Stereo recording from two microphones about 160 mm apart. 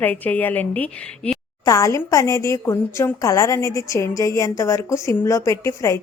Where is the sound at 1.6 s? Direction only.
20° left (ahead or behind).